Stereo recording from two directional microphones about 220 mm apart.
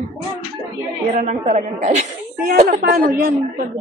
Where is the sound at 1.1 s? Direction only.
30° right (ahead or behind).